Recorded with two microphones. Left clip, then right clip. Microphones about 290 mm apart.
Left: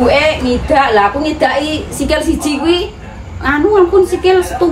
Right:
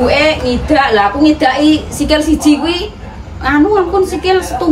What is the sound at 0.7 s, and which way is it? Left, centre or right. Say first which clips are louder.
A woman's voice: even; centre.